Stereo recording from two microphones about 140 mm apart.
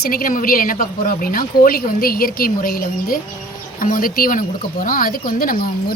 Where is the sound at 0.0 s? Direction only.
90° left.